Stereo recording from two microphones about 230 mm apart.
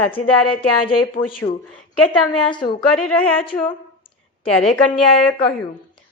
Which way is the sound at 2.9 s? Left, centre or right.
Centre.